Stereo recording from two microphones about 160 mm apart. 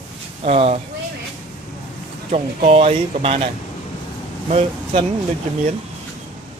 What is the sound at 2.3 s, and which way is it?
Speech, 40° right (ahead or behind).